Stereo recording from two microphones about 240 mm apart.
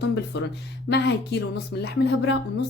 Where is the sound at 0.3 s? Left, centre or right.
Left.